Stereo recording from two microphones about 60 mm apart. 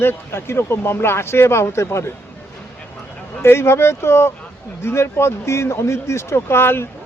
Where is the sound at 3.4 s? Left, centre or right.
Left.